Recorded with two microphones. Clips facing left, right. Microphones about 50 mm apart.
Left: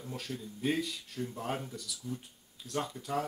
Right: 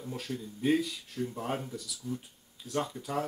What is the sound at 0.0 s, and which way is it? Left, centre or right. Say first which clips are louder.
Speech: right 3 dB; centre.